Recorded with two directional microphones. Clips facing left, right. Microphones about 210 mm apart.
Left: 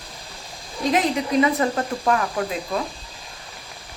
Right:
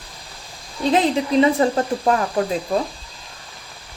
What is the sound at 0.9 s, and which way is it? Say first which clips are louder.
Speech: right 3 dB; 30° right (ahead or behind).